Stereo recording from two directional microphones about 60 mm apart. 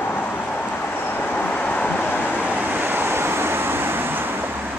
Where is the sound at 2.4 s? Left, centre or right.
Right.